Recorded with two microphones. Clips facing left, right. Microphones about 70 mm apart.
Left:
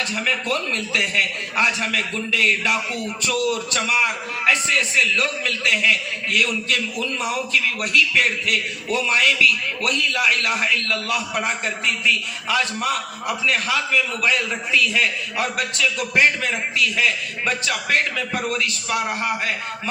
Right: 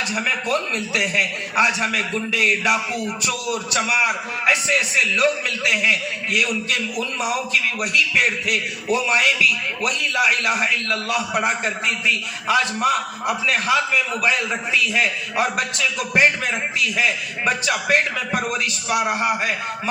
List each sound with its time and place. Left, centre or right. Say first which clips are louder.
0.0 s a man's voice: right 1 dB; centre